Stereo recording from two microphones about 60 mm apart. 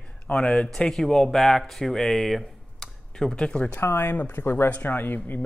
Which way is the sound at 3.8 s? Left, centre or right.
Left.